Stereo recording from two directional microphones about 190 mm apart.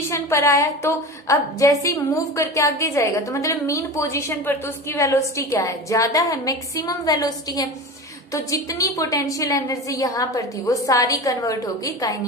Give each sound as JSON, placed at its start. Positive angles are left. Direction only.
{"t": 0.1, "sound": "a woman's voice", "side_deg": 15}